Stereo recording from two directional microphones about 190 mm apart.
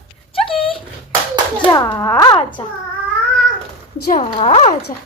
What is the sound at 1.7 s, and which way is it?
Speech, 20° left (ahead or behind).